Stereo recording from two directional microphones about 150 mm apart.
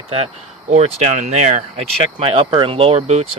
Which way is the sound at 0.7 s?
50° right (ahead or behind).